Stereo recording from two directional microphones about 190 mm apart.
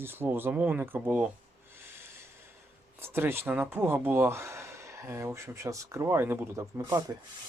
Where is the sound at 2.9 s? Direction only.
10° right (ahead or behind).